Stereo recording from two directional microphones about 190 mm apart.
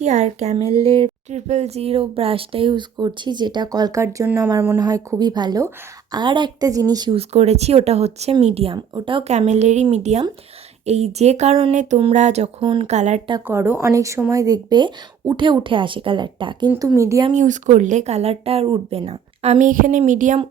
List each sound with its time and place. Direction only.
0.0 s a woman's voice: 35° right (ahead or behind)
13.5 s a woman's voice: 10° right (ahead or behind)
17.3 s speech: 40° right (ahead or behind)